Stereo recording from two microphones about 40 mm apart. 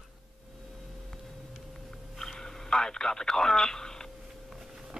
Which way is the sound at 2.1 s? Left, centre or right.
Centre.